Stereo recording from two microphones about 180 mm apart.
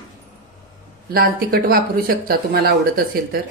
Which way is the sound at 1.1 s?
55° right (ahead or behind).